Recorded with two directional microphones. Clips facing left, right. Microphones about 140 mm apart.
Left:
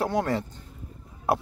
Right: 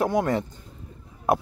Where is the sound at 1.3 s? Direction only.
20° right (ahead or behind).